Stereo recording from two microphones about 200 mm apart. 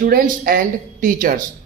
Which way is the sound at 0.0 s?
45° right (ahead or behind).